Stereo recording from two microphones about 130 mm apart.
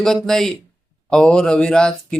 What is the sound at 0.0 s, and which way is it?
Speech, 5° left (ahead or behind).